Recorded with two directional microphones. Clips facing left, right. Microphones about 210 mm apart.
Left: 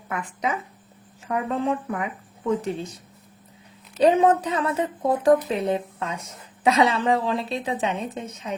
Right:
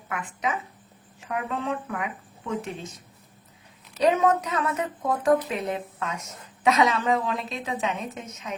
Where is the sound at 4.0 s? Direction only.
30° left (ahead or behind).